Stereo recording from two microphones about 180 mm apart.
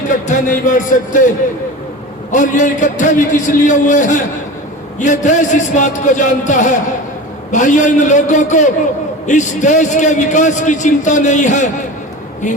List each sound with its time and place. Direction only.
0.3 s a man's voice: 45° left (ahead or behind)
2.3 s a man's voice: 45° left (ahead or behind)